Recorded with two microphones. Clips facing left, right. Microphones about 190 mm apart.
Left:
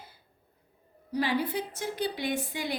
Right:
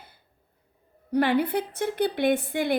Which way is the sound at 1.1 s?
60° right (ahead or behind).